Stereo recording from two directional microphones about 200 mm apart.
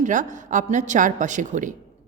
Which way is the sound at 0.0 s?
40° right (ahead or behind).